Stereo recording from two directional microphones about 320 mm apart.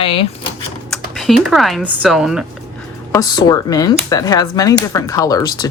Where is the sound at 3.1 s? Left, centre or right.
Centre.